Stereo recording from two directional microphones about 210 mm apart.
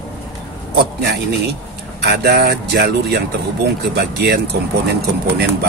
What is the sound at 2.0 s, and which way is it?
Speech, 50° right (ahead or behind).